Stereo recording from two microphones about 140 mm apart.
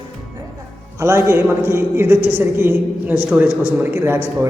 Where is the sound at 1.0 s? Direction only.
20° right (ahead or behind).